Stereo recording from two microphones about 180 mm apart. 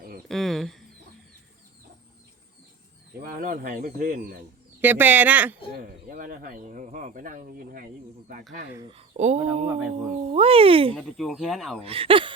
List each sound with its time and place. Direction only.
0.3 s a sound: centre (ahead or behind)
3.2 s speech: 50° right (ahead or behind)
4.8 s speech: 10° right (ahead or behind)
5.7 s speech: 50° right (ahead or behind)
8.9 s speech: 35° right (ahead or behind)
9.4 s speech: 5° right (ahead or behind)
10.3 s speech: 30° right (ahead or behind)
10.9 s speech: centre (ahead or behind)
11.8 s speech: 30° right (ahead or behind)